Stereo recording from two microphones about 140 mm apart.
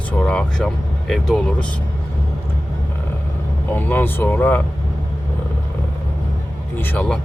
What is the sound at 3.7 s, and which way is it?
Speech, 15° left (ahead or behind).